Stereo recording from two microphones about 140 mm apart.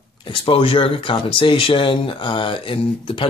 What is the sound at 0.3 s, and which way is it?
Speech, 40° left (ahead or behind).